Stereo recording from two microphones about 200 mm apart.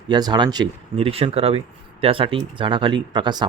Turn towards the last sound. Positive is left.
turn(degrees=-20)  # may be behind; listen again after turning